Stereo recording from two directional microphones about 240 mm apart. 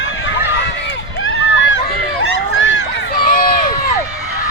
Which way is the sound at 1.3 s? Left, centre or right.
Left.